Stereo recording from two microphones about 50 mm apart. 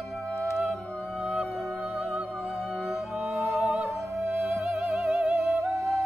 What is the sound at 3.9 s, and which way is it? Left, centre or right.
Music, right.